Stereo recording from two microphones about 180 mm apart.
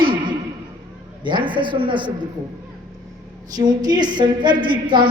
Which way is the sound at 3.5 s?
20° right (ahead or behind).